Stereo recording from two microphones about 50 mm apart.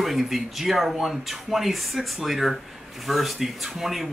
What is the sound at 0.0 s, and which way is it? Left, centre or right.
Speech, centre.